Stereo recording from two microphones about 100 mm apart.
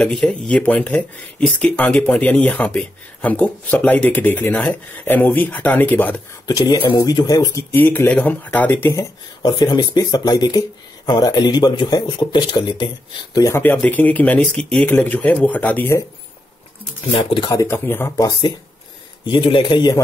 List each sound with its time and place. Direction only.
0.0 s speech: 5° left (ahead or behind)
6.4 s speech: 40° left (ahead or behind)
7.7 s speech: 20° left (ahead or behind)
8.9 s speech: 40° left (ahead or behind)
13.4 s speech: 25° left (ahead or behind)
17.6 s speech: 25° left (ahead or behind)
18.1 s speech: 40° left (ahead or behind)
19.2 s a man's voice: 60° left (ahead or behind)